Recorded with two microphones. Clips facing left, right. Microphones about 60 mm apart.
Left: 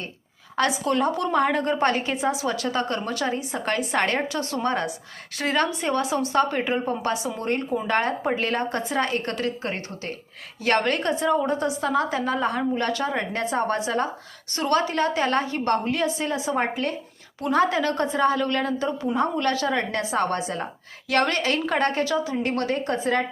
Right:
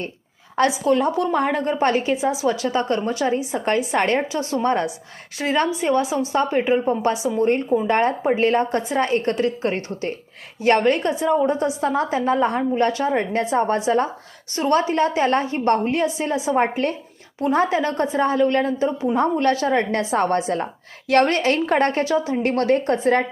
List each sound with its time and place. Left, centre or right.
0.6 s a woman's voice: centre; by 4.9 s right
5.4 s a woman's voice: centre
10.8 s a woman's voice: centre
16.5 s a woman's voice: right
17.4 s a woman's voice: right
19.1 s a woman's voice: right